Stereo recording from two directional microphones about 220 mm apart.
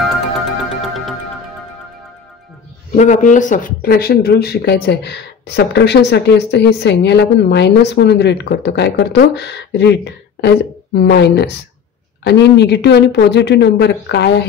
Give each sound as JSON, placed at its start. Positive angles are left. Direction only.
{"t": 3.0, "sound": "a woman's voice", "side_deg": 35}